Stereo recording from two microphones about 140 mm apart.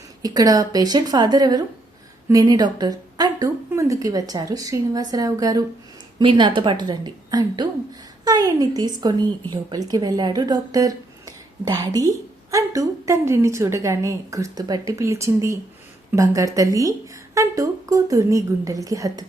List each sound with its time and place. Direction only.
0.2 s a woman's voice: 25° right (ahead or behind)